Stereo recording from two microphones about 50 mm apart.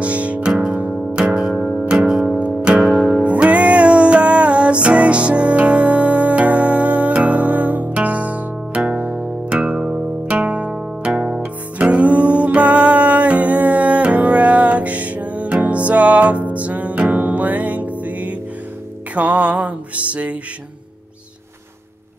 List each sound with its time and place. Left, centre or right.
0.0 s music: right
0.8 s music: centre
1.6 s music: centre
1.9 s music: centre; by 20.3 s right